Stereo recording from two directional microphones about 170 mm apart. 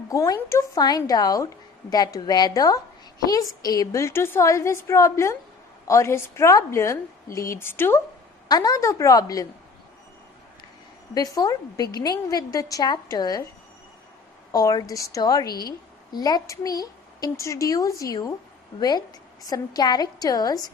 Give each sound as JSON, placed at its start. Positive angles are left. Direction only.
{"t": 0.1, "sound": "a woman's voice", "side_deg": 20}
{"t": 11.1, "sound": "a woman's voice", "side_deg": 20}
{"t": 14.5, "sound": "a woman's voice", "side_deg": 20}
{"t": 15.4, "sound": "a woman's voice", "side_deg": 65}
{"t": 16.1, "sound": "a woman's voice", "side_deg": 25}